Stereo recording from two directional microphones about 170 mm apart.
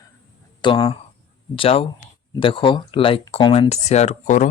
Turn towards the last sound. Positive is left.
turn(degrees=45)  # may be behind; listen again after turning